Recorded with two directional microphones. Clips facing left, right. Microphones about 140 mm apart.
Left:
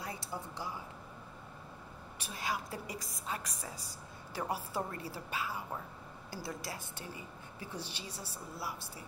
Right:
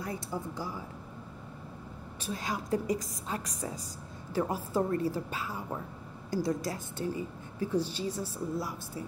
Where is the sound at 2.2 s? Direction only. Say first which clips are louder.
Right 4 dB; 40° right (ahead or behind).